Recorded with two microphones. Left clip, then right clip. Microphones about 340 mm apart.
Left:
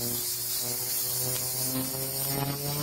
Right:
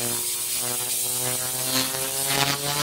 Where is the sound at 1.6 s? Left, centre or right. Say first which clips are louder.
Right 8 dB; right.